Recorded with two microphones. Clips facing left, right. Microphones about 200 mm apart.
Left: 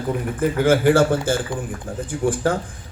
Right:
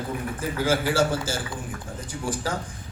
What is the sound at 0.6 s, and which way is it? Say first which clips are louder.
A man's voice: left 7 dB; 55° left (ahead or behind).